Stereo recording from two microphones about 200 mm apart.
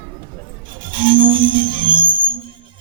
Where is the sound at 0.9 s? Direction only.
25° right (ahead or behind).